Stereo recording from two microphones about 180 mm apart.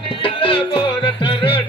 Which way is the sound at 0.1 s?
30° left (ahead or behind).